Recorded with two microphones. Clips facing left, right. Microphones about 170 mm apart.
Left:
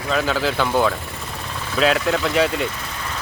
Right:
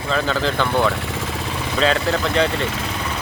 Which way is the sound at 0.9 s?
90° right.